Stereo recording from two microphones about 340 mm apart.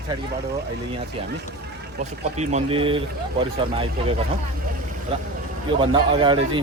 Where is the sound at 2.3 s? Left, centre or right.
Centre.